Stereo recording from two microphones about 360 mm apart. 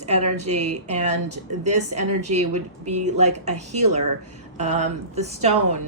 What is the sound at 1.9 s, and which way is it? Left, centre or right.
Speech, right.